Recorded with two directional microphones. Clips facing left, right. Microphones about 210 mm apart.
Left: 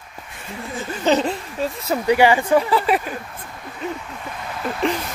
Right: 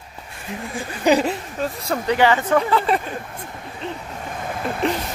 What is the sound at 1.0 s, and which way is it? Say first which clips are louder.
Speech: right 1 dB; 10° right (ahead or behind).